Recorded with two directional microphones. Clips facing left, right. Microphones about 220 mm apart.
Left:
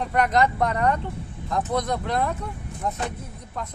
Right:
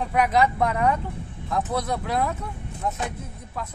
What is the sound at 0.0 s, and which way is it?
A man's voice, 5° right (ahead or behind).